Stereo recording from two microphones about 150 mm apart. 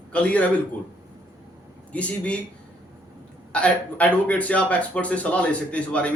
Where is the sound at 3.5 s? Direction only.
10° left (ahead or behind).